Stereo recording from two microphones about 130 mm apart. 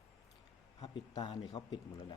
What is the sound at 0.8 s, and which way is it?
Speech, 35° left (ahead or behind).